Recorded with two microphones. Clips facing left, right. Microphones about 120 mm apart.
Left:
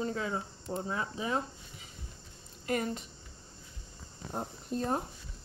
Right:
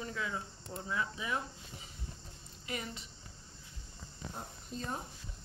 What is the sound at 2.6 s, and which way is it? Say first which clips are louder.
Speech: left 9 dB; 45° left (ahead or behind).